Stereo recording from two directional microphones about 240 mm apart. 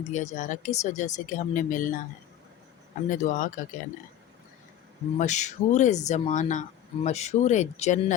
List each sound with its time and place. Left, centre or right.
0.1 s speech: left
3.1 s speech: left
5.1 s speech: left